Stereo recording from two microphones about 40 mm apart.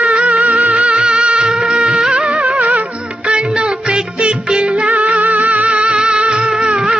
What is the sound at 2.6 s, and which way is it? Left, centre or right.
Music, right.